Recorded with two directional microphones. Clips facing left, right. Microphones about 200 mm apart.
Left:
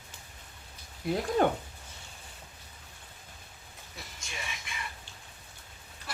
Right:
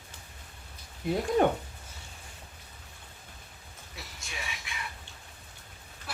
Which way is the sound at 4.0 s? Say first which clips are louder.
Right 1 dB; centre (ahead or behind).